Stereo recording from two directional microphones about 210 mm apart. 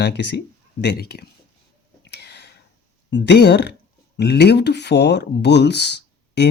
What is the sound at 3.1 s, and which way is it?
Speech, 55° left (ahead or behind).